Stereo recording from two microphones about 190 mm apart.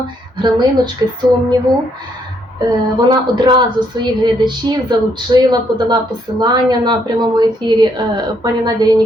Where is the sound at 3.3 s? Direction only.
25° right (ahead or behind).